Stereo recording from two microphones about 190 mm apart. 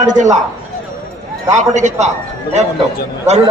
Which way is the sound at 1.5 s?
40° right (ahead or behind).